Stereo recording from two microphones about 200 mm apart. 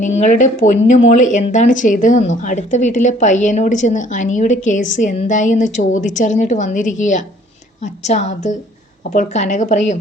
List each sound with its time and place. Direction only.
0.0 s speech: 35° left (ahead or behind)